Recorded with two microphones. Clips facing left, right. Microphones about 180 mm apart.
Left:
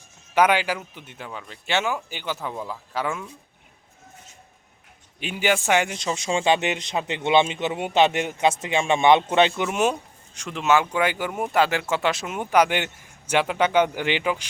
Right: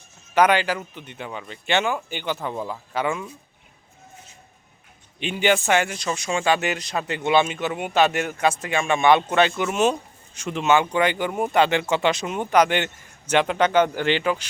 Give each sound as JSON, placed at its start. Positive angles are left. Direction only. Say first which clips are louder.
{"t": 0.3, "sound": "speech", "louder": "right 1 dB", "side_deg": 10}
{"t": 5.2, "sound": "speech", "louder": "right 2 dB", "side_deg": 5}
{"t": 9.7, "sound": "speech", "louder": "right 3 dB", "side_deg": 10}
{"t": 10.3, "sound": "speech", "louder": "right 1 dB", "side_deg": 0}